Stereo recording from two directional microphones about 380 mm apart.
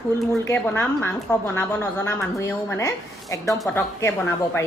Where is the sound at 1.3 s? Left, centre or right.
Centre.